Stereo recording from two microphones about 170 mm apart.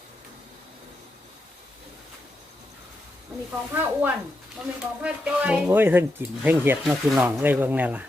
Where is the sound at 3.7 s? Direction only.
10° right (ahead or behind).